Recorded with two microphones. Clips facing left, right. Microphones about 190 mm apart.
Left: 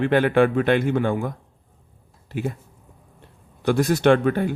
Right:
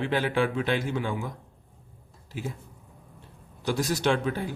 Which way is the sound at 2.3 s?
60° left (ahead or behind).